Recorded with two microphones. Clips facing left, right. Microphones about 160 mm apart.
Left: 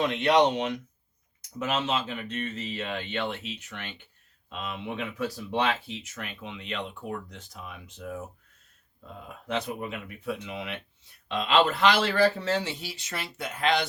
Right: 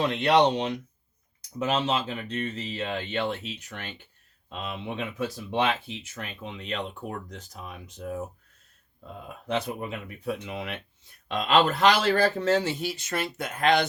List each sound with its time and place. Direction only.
0.0 s speech: 35° right (ahead or behind)
4.4 s speech: 30° right (ahead or behind)
6.0 s speech: 35° right (ahead or behind)
10.2 s speech: 45° right (ahead or behind)